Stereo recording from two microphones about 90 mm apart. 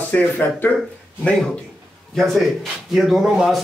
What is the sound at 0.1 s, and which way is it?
Speech, 20° left (ahead or behind).